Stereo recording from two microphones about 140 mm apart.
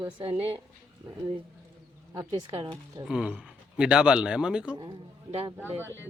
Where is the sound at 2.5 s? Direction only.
40° right (ahead or behind).